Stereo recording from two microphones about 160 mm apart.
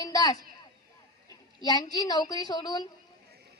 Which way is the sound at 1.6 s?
25° left (ahead or behind).